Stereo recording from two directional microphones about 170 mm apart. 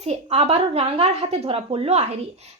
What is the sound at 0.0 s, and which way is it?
A woman's voice, 40° right (ahead or behind).